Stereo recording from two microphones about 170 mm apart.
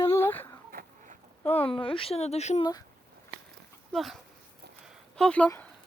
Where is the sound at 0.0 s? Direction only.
15° left (ahead or behind).